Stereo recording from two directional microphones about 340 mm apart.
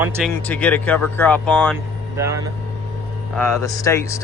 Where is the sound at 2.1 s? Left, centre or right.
Centre.